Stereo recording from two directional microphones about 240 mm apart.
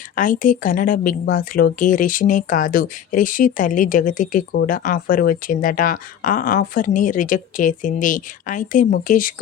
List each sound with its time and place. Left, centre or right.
0.2 s a woman's voice: left